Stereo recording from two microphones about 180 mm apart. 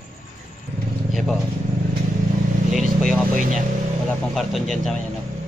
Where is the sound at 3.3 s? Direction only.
50° right (ahead or behind).